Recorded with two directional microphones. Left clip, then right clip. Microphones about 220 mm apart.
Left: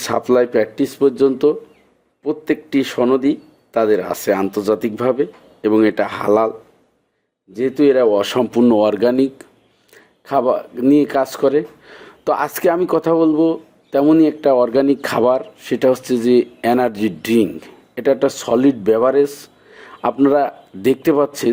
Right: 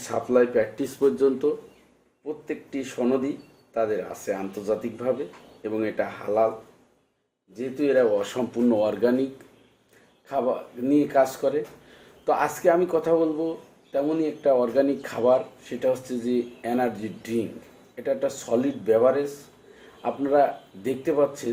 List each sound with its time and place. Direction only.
0.0 s speech: 45° left (ahead or behind)
2.2 s speech: 50° left (ahead or behind)
7.5 s speech: 45° left (ahead or behind)